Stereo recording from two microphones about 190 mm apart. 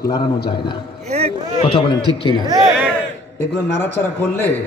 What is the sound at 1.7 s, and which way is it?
Speech, 25° left (ahead or behind).